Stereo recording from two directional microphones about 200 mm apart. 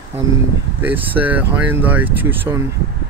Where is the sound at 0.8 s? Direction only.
10° right (ahead or behind).